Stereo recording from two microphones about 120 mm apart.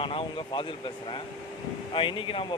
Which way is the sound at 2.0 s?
45° left (ahead or behind).